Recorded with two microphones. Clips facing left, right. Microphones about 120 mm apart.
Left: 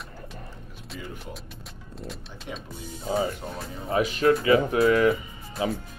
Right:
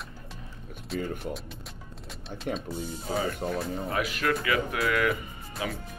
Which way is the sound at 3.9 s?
30° left (ahead or behind).